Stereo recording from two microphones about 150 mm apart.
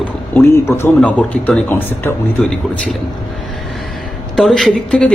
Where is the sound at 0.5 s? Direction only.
20° left (ahead or behind).